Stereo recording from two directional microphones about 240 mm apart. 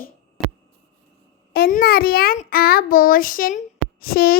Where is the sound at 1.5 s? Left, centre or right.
Left.